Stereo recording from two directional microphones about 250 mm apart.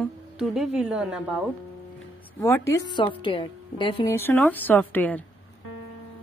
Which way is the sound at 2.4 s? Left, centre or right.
Centre.